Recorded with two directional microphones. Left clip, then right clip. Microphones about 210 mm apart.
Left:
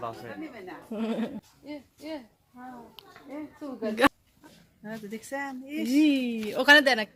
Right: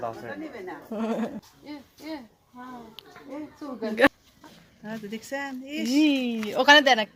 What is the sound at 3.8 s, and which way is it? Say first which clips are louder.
Speech: right 3 dB; 10° left (ahead or behind).